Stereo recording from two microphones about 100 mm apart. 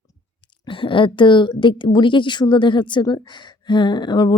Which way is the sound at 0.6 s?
60° left (ahead or behind).